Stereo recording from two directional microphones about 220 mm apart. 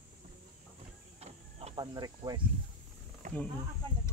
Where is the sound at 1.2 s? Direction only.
25° right (ahead or behind).